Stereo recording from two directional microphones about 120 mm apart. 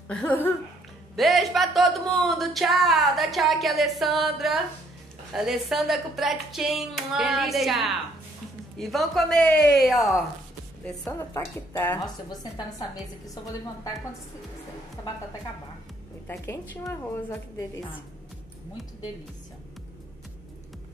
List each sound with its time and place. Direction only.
0.1 s speech: 10° left (ahead or behind)
1.1 s speech: centre (ahead or behind)
9.8 s speech: centre (ahead or behind)
11.1 s a woman's voice: 25° left (ahead or behind)
12.3 s a woman's voice: 30° left (ahead or behind)
15.0 s speech: 25° left (ahead or behind)
16.3 s a woman's voice: 20° left (ahead or behind)